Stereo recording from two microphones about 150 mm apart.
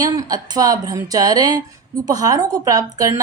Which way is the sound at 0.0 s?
25° right (ahead or behind).